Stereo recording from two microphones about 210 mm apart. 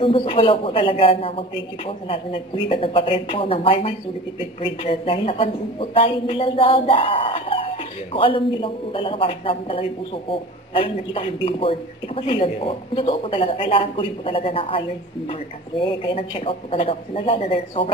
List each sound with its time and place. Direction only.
0.0 s speech: 25° left (ahead or behind)
15.8 s speech: 25° left (ahead or behind)